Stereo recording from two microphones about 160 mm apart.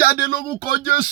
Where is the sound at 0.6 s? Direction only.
65° left (ahead or behind).